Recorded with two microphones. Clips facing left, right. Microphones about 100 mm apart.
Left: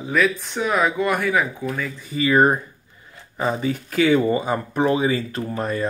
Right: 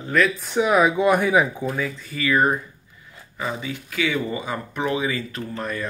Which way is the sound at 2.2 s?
35° left (ahead or behind).